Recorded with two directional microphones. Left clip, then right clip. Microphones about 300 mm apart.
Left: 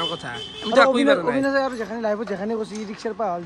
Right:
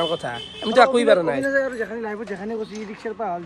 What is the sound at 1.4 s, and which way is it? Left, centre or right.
Speech, centre.